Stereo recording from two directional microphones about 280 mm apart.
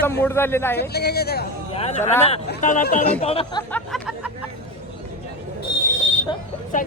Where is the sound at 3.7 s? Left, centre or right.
Centre.